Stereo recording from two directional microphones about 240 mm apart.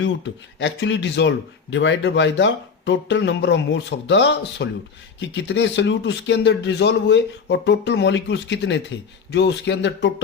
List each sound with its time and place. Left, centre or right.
0.6 s speech: left